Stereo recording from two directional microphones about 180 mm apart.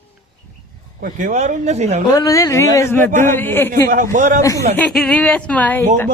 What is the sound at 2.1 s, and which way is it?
Speech, 20° left (ahead or behind).